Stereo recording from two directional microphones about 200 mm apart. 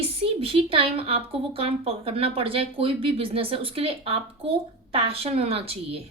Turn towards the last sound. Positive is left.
turn(degrees=-30)  # may be behind; listen again after turning